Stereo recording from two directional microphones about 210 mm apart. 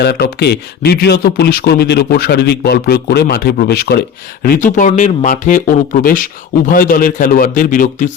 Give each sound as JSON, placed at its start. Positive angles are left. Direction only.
{"t": 0.0, "sound": "speech", "side_deg": 50}
{"t": 4.4, "sound": "speech", "side_deg": 40}